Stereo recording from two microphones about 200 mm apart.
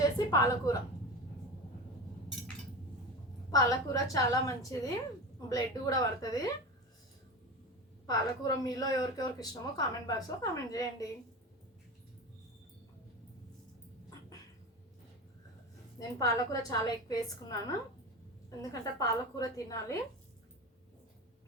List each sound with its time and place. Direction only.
0.0 s a sound: 15° left (ahead or behind)
3.5 s a woman's voice: 15° left (ahead or behind)
8.1 s a woman's voice: 20° left (ahead or behind)
16.0 s a woman's voice: 15° left (ahead or behind)